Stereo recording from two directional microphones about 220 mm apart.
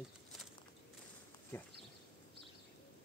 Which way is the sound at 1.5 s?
10° left (ahead or behind).